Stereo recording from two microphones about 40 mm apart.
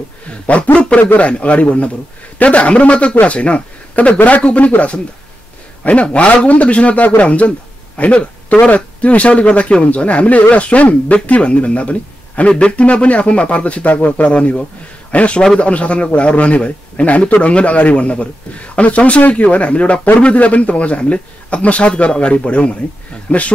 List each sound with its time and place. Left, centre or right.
0.3 s a man's voice: left
6.1 s a man's voice: left